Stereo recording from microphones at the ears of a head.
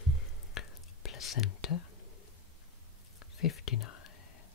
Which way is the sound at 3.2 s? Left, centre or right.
Left.